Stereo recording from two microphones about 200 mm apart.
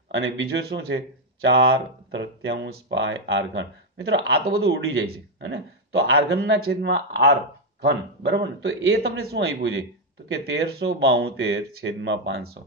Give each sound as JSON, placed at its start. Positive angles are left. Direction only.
{"t": 0.1, "sound": "speech", "side_deg": -55}